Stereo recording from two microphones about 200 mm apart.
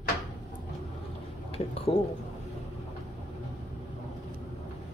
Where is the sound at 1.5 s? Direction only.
30° left (ahead or behind).